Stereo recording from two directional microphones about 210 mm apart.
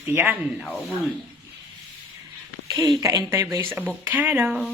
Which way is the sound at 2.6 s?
15° right (ahead or behind).